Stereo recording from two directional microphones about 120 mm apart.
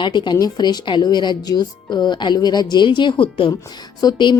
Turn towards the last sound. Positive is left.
turn(degrees=35)  # may be behind; listen again after turning